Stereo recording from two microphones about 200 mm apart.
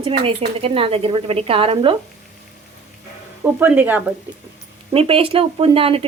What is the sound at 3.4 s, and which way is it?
Speech, 10° right (ahead or behind).